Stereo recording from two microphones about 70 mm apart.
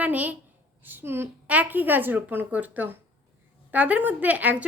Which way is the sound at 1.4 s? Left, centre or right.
Right.